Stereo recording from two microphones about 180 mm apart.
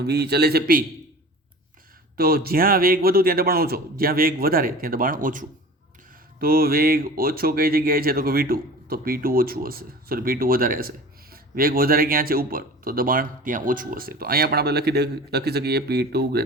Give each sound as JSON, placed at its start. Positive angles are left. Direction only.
{"t": 0.0, "sound": "speech", "side_deg": -65}
{"t": 2.1, "sound": "speech", "side_deg": -55}